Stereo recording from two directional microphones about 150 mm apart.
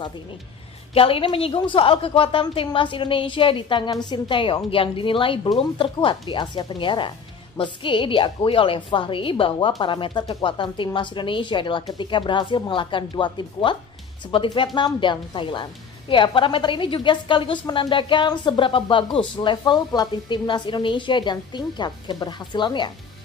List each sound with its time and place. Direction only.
0.9 s a woman's voice: 40° left (ahead or behind)